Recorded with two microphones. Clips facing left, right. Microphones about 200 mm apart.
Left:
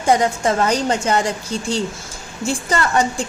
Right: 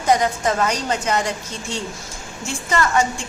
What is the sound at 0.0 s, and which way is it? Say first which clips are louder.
A woman's voice: left 2 dB; 30° left (ahead or behind).